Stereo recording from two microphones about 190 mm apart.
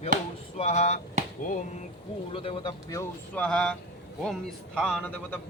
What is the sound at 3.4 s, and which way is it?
A man's voice, 5° left (ahead or behind).